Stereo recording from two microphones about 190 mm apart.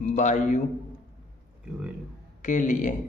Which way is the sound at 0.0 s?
40° left (ahead or behind).